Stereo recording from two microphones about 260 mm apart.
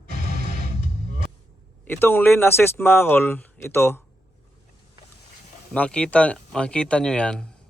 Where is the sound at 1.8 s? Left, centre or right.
Centre.